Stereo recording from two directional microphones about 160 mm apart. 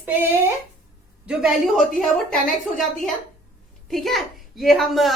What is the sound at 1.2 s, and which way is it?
Speech, 5° right (ahead or behind).